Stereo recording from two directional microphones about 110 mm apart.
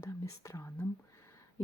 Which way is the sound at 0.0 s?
30° left (ahead or behind).